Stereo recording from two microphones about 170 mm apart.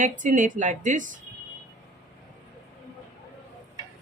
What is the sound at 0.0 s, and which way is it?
Speech, 50° right (ahead or behind).